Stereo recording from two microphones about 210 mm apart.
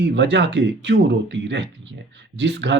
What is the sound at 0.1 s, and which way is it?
Speech, 55° right (ahead or behind).